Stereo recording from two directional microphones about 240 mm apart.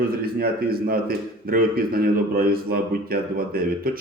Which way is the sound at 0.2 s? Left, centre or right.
Right.